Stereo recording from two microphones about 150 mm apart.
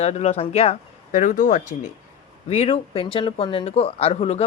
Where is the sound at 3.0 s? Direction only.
35° left (ahead or behind).